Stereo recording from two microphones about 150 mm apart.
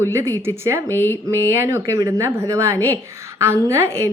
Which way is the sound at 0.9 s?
15° left (ahead or behind).